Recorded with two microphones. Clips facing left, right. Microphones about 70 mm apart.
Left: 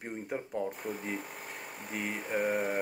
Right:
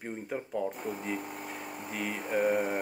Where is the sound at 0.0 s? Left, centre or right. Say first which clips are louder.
Right 1 dB; centre.